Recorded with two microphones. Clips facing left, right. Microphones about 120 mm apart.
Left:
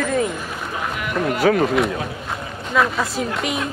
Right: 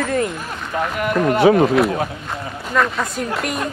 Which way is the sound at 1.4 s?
25° right (ahead or behind).